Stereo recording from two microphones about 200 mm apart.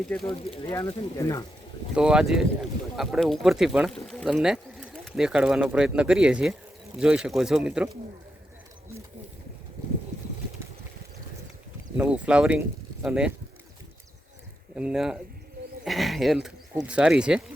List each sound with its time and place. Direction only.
0.0 s speech: 5° left (ahead or behind)
0.7 s speech: 15° left (ahead or behind)
2.0 s speech: 5° right (ahead or behind)
11.9 s speech: 5° right (ahead or behind)
14.8 s speech: 5° right (ahead or behind)